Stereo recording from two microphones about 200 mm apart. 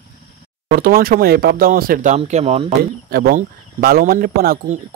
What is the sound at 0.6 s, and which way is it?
Speech, 50° right (ahead or behind).